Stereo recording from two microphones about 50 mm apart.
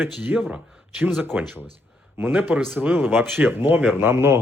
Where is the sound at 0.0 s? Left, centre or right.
Right.